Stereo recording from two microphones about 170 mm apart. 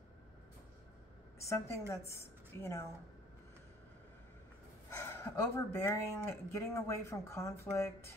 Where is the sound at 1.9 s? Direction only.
15° left (ahead or behind).